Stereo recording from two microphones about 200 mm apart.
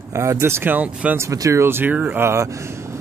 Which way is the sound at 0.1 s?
15° right (ahead or behind).